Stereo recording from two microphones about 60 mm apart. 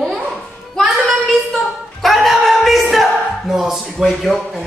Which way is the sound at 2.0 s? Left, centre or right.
Centre.